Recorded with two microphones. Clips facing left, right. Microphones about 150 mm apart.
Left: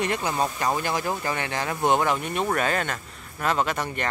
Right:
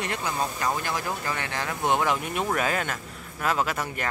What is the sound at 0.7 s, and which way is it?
Speech, 25° left (ahead or behind).